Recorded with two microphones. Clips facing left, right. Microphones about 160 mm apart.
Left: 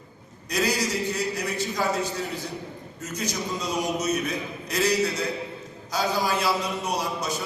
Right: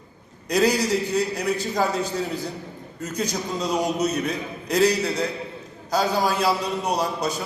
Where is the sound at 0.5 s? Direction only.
60° right (ahead or behind).